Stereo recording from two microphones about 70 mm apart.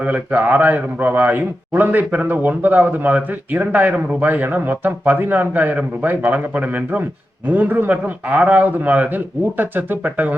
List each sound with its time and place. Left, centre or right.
0.0 s a man's voice: right